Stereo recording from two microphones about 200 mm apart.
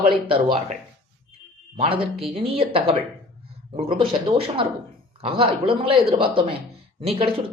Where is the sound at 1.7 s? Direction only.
25° right (ahead or behind).